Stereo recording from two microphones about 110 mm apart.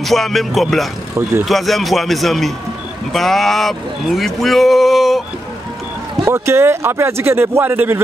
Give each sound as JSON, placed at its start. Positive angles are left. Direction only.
{"t": 0.0, "sound": "speech", "side_deg": 0}
{"t": 6.2, "sound": "speech", "side_deg": -25}